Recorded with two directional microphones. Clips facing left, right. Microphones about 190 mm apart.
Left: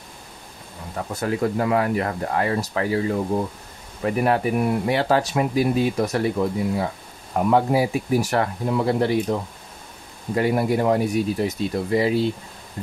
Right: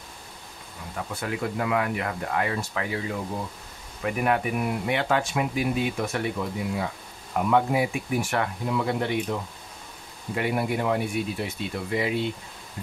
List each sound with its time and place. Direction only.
0.9 s speech: 40° left (ahead or behind)
12.8 s insect: 45° left (ahead or behind)